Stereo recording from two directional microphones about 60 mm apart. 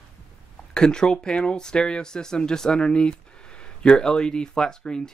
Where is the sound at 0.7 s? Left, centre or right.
Centre.